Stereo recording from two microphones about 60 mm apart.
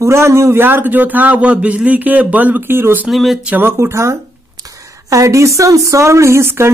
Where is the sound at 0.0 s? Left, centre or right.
Right.